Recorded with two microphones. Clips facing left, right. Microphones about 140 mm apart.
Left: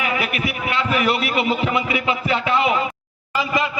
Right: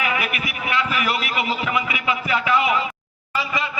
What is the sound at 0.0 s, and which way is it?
A man's voice, 35° left (ahead or behind).